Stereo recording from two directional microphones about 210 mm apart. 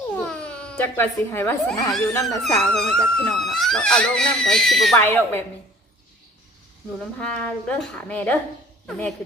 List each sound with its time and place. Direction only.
0.2 s speech: 5° left (ahead or behind)
7.2 s speech: 5° left (ahead or behind)